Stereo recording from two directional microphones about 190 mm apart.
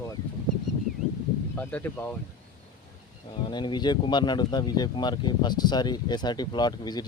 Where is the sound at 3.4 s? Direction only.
25° left (ahead or behind).